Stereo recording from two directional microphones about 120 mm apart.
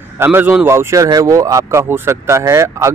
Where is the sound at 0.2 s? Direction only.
15° right (ahead or behind).